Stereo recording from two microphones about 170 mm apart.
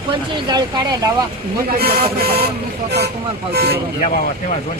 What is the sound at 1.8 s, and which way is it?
Speech, 65° right (ahead or behind).